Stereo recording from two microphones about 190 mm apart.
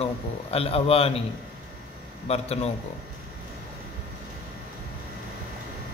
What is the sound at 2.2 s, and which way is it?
Speech, 35° left (ahead or behind).